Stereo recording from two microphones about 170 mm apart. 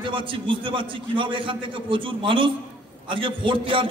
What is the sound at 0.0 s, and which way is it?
A man's voice, 30° right (ahead or behind).